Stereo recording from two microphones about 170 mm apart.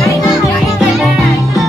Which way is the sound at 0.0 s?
20° left (ahead or behind).